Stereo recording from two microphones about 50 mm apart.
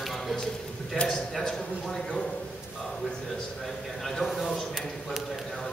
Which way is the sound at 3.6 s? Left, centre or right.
Centre.